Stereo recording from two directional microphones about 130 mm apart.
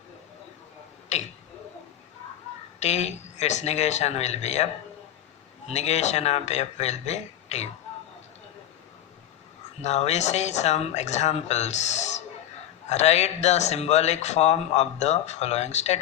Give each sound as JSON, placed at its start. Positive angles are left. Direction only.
{"t": 2.8, "sound": "speech", "side_deg": 60}
{"t": 9.8, "sound": "speech", "side_deg": 60}